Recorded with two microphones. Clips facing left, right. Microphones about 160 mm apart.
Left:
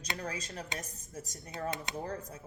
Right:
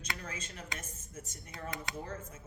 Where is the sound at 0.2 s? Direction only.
35° left (ahead or behind).